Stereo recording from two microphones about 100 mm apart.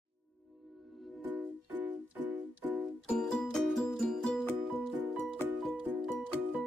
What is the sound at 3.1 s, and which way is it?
Music, 5° left (ahead or behind).